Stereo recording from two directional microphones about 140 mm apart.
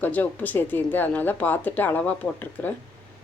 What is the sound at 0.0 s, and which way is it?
A woman's voice, 10° left (ahead or behind).